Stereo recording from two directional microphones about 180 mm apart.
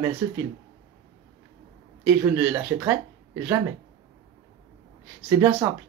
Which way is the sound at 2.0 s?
10° right (ahead or behind).